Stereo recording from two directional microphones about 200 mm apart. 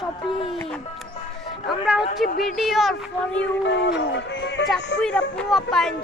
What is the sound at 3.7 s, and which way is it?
Music, 65° left (ahead or behind).